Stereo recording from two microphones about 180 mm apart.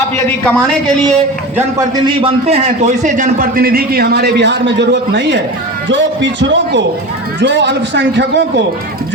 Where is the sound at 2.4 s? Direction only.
35° right (ahead or behind); by 5.3 s 75° right (ahead or behind).